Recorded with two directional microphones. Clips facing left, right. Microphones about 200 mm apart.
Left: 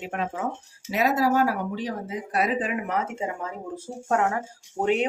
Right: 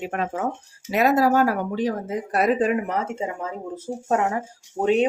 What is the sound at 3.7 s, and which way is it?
Speech, 20° right (ahead or behind).